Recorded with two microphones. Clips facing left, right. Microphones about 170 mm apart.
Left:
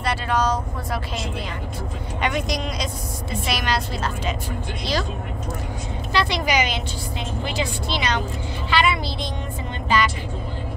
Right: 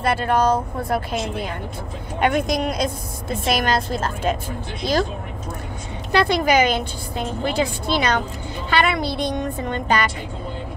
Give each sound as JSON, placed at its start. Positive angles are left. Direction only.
{"t": 0.0, "sound": "a woman's voice", "side_deg": -50}
{"t": 6.1, "sound": "a woman's voice", "side_deg": -50}